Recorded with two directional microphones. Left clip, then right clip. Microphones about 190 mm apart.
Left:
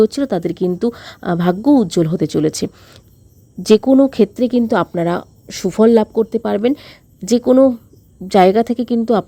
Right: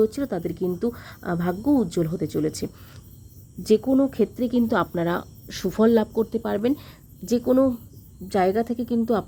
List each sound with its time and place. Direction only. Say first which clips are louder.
0.0 s speech: left 8 dB; 40° left (ahead or behind)